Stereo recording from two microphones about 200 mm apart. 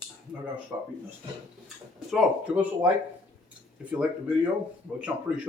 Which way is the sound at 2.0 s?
5° right (ahead or behind).